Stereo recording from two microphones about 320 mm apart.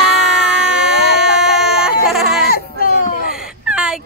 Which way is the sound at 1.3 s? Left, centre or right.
Centre.